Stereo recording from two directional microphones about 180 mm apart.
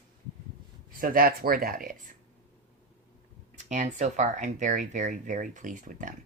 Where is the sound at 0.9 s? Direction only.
50° right (ahead or behind).